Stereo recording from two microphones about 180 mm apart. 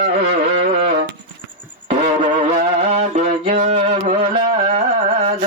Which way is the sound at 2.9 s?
45° right (ahead or behind).